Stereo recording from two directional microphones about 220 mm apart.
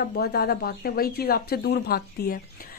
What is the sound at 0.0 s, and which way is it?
A woman's voice, 45° left (ahead or behind).